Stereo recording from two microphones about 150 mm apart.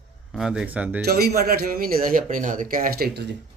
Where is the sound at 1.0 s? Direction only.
90° right.